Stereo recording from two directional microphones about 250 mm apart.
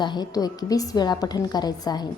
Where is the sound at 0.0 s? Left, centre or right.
Centre.